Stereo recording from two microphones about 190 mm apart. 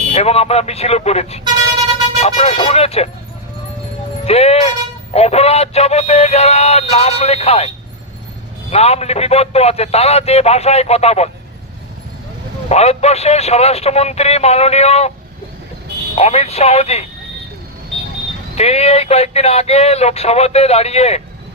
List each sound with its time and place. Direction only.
0.1 s speech: 30° left (ahead or behind)
4.3 s speech: 30° left (ahead or behind)
8.7 s speech: 35° left (ahead or behind)
12.6 s speech: 35° left (ahead or behind)
16.1 s speech: 35° left (ahead or behind)
18.5 s speech: 35° left (ahead or behind)